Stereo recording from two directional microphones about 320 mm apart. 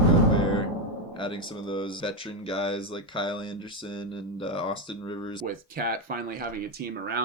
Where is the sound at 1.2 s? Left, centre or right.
Centre.